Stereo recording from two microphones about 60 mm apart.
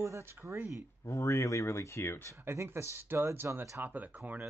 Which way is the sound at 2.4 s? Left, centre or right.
Right.